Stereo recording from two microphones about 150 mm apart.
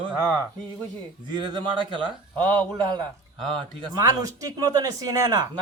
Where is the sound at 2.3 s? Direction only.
10° left (ahead or behind).